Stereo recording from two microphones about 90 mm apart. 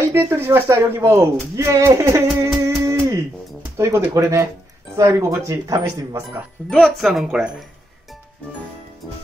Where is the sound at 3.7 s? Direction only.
30° right (ahead or behind).